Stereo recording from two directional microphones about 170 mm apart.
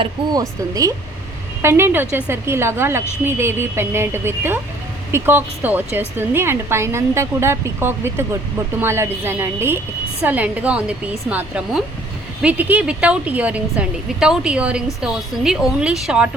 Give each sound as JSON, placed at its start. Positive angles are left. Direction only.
{"t": 0.0, "sound": "a woman's voice", "side_deg": -20}